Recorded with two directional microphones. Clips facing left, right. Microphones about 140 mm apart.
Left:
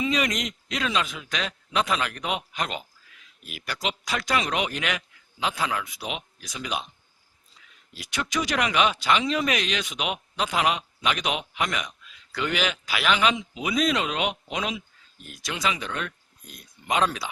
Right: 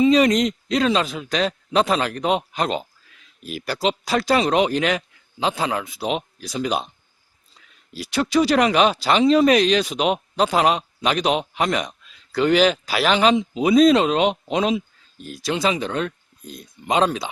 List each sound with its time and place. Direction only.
0.0 s a man's voice: 35° right (ahead or behind)
7.9 s speech: 35° right (ahead or behind)